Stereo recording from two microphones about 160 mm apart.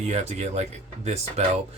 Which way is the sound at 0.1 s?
45° right (ahead or behind).